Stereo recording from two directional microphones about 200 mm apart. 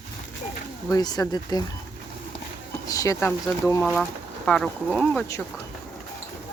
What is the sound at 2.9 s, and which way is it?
Speech, 15° left (ahead or behind).